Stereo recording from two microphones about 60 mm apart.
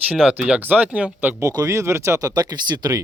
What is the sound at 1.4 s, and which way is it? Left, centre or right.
Speech, right.